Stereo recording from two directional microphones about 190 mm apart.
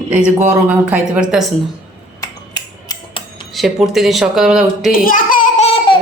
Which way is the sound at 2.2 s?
20° left (ahead or behind).